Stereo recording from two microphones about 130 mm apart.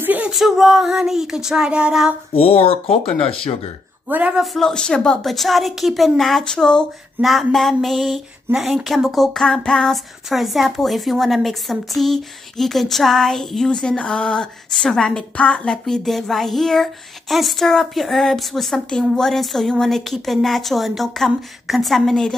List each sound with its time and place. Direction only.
0.0 s a sound: 10° right (ahead or behind)
0.3 s speech: centre (ahead or behind)
2.3 s speech: 50° left (ahead or behind)
4.1 s a man's voice: 10° right (ahead or behind)
4.6 s speech: 5° left (ahead or behind)